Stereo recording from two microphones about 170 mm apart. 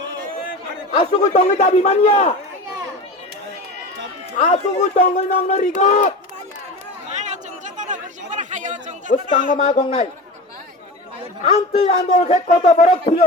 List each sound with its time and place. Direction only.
0.9 s a man's voice: 40° left (ahead or behind)
4.4 s speech: 40° left (ahead or behind)
7.2 s chatter: 45° right (ahead or behind)
9.5 s a man's voice: 45° left (ahead or behind)
11.4 s a man's voice: 40° left (ahead or behind)